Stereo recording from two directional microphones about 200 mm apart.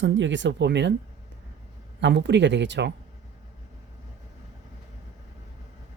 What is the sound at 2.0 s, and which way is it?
Speech, 60° right (ahead or behind).